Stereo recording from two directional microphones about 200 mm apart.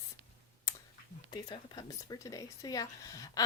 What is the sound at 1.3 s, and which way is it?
Speech, 20° left (ahead or behind).